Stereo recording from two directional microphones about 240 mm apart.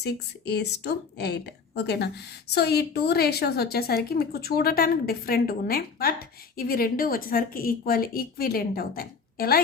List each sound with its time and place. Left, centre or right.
0.0 s speech: left